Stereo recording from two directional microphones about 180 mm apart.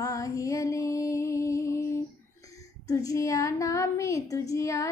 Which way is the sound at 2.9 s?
20° left (ahead or behind).